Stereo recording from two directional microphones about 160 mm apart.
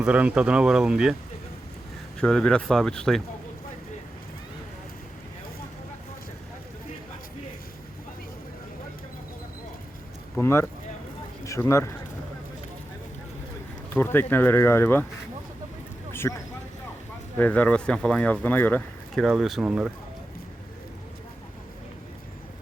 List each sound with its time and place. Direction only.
0.0 s speech: 5° right (ahead or behind)
2.1 s speech: 5° left (ahead or behind)
10.3 s speech: 15° left (ahead or behind)
13.9 s speech: 15° left (ahead or behind)
16.1 s speech: 15° left (ahead or behind); by 19.9 s 5° right (ahead or behind)